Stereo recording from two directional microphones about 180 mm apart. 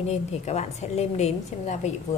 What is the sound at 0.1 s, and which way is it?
A woman's voice, 35° left (ahead or behind).